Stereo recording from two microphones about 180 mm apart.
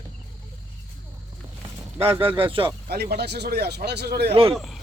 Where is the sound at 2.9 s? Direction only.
60° right (ahead or behind).